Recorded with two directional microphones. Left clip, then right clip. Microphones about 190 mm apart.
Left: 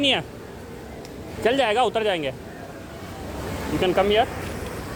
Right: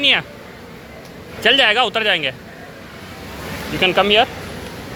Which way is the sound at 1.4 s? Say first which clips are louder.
Right 6 dB; 5° left (ahead or behind).